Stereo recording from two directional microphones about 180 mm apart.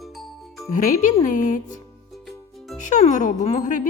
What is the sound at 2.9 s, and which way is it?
Speech, 40° left (ahead or behind).